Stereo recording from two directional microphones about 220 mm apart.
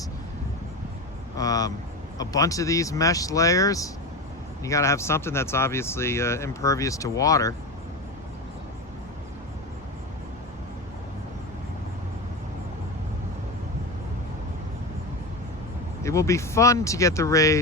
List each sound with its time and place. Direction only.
1.4 s speech: 15° left (ahead or behind)
16.0 s speech: 15° left (ahead or behind)